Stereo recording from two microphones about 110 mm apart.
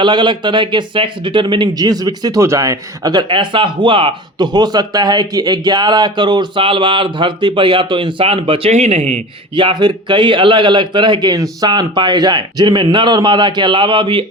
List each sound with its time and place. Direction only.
0.0 s speech: 45° right (ahead or behind)
8.7 s speech: 80° right
9.6 s speech: 45° right (ahead or behind)